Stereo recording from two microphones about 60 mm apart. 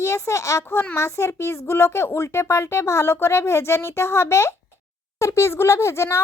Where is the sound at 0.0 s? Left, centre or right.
Left.